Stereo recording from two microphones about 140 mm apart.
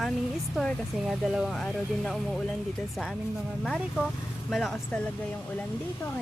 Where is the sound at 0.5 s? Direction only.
Centre (ahead or behind).